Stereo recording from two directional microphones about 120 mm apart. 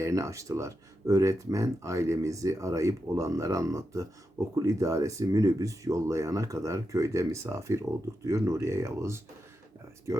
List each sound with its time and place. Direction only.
0.0 s speech: 25° right (ahead or behind)